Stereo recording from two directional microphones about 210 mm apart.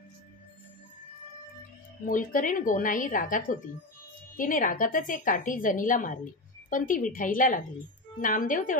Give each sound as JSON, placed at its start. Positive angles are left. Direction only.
{"t": 2.0, "sound": "a woman's voice", "side_deg": 40}